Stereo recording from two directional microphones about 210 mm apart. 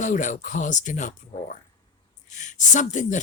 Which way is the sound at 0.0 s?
35° left (ahead or behind).